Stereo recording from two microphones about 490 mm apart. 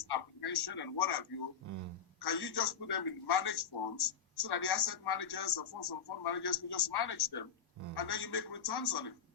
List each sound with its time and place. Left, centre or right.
0.1 s a man's voice: left
1.6 s speech: right
2.1 s a man's voice: left